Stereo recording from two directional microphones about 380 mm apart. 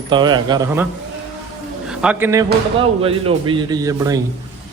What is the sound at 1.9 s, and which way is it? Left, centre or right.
A man's voice, centre.